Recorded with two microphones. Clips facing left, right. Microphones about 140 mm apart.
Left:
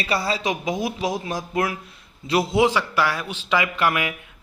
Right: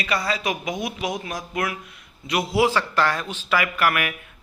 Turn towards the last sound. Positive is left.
turn(degrees=20)  # may be behind; listen again after turning